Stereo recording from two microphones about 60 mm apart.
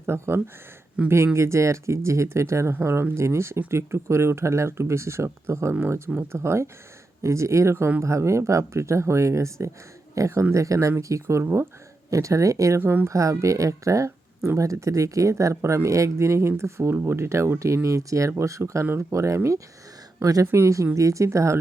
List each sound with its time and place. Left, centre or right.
0.0 s speech: right
12.8 s speech: right
13.1 s speech: right
20.5 s speech: right